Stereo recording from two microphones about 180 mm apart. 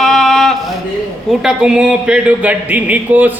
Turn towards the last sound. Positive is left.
turn(degrees=-10)  # may be behind; listen again after turning